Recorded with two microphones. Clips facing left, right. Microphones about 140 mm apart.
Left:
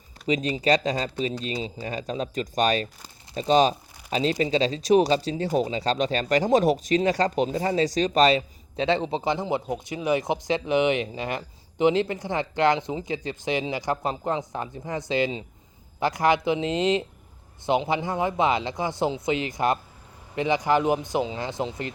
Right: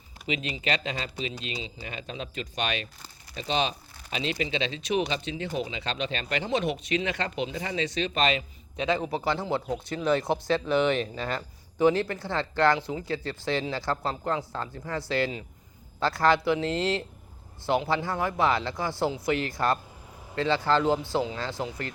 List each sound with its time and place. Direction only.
0.3 s speech: 40° left (ahead or behind); by 21.9 s 20° left (ahead or behind)